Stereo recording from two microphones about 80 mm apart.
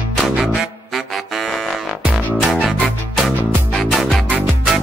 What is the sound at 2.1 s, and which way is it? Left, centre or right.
Music, centre.